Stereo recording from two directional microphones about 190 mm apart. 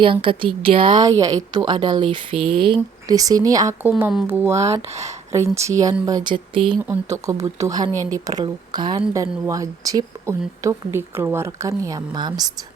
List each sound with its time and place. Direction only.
0.0 s a woman's voice: 25° right (ahead or behind)
6.8 s speech: 15° right (ahead or behind)